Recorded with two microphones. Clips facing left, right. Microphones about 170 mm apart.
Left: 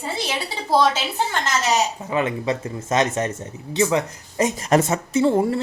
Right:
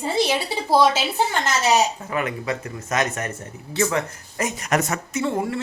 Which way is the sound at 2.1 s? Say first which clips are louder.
Left 3 dB; 25° left (ahead or behind).